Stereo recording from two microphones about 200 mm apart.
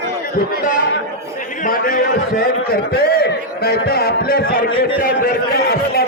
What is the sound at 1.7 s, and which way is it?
A man's voice, 45° left (ahead or behind).